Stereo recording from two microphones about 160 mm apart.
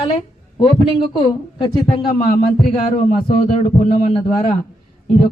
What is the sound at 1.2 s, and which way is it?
Speech, 30° left (ahead or behind).